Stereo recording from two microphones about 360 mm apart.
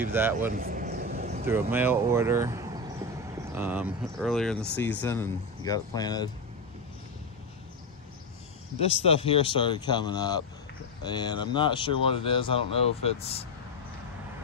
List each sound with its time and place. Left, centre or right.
0.1 s speech: centre
0.5 s a sound: right
1.5 s speech: centre
9.0 s speech: centre